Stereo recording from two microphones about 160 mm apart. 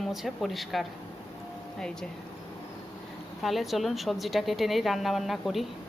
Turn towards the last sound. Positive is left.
turn(degrees=0)  # may be behind; listen again after turning